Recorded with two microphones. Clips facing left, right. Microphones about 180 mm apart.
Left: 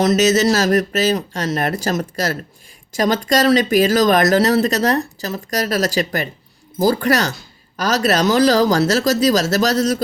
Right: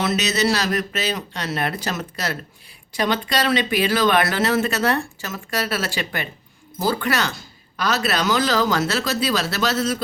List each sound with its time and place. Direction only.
0.0 s speech: 40° left (ahead or behind)